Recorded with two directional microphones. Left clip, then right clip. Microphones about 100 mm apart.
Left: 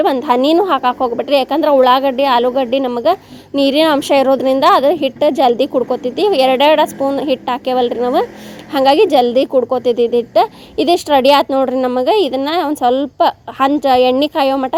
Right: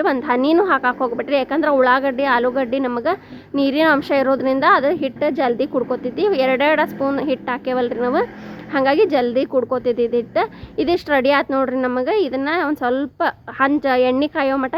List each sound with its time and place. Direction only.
0.0 s speech: 25° left (ahead or behind)
9.5 s speech: 15° left (ahead or behind)